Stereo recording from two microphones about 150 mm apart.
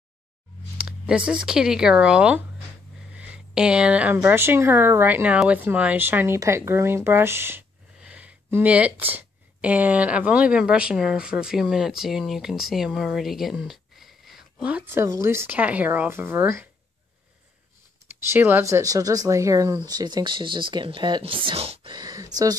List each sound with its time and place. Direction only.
0.7 s speech: 5° right (ahead or behind)
18.0 s speech: 15° right (ahead or behind); by 21.9 s 40° right (ahead or behind)
21.9 s speech: 25° right (ahead or behind)